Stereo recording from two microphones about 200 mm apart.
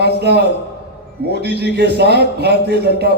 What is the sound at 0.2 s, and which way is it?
A man's voice, 55° right (ahead or behind).